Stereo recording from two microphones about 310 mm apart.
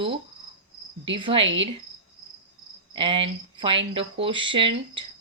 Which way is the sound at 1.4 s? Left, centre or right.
Right.